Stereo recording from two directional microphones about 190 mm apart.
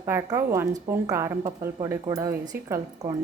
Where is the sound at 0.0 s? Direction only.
15° right (ahead or behind).